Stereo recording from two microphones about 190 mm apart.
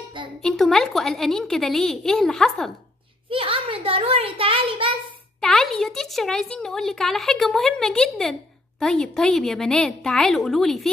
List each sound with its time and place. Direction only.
0.4 s speech: 5° left (ahead or behind)
3.3 s a child's voice: 30° right (ahead or behind)
5.4 s speech: centre (ahead or behind)